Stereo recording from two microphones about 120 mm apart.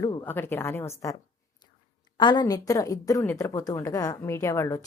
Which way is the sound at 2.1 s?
40° left (ahead or behind).